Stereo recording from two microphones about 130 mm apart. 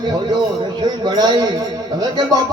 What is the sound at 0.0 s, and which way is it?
Music, 35° right (ahead or behind).